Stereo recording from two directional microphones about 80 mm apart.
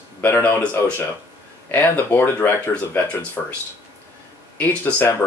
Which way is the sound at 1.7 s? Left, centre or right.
Left.